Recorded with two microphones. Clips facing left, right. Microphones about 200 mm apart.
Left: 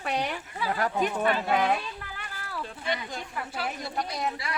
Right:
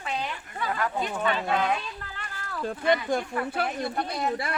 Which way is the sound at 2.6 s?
50° right (ahead or behind).